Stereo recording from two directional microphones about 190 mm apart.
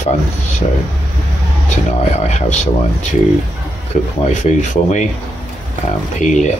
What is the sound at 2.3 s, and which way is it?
Speech, 40° left (ahead or behind).